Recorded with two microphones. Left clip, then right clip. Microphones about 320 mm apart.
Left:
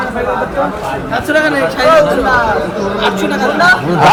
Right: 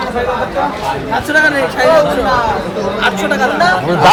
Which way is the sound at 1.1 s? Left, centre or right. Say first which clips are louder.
Right 1 dB; centre.